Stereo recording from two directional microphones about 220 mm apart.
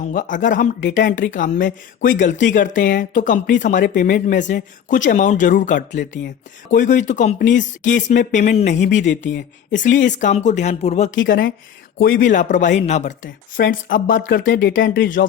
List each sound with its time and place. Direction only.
0.1 s speech: 35° left (ahead or behind)
11.1 s speech: 55° left (ahead or behind)
11.9 s speech: 40° left (ahead or behind)
13.2 s speech: 55° left (ahead or behind)
13.8 s speech: 40° left (ahead or behind)
14.5 s speech: 55° left (ahead or behind)
14.9 s speech: 40° left (ahead or behind)